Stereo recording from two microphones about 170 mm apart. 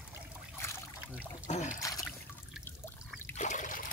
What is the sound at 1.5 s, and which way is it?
Trickle, 40° left (ahead or behind).